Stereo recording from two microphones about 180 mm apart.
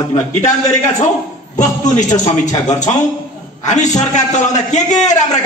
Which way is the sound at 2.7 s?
40° left (ahead or behind).